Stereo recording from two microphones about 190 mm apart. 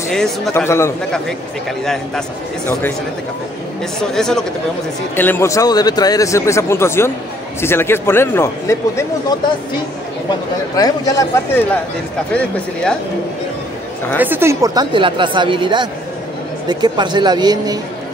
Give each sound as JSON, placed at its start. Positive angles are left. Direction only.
{"t": 0.1, "sound": "speech", "side_deg": 5}
{"t": 0.7, "sound": "speech", "side_deg": 15}
{"t": 4.0, "sound": "speech", "side_deg": 5}
{"t": 10.8, "sound": "speech", "side_deg": 20}
{"t": 14.2, "sound": "speech", "side_deg": -10}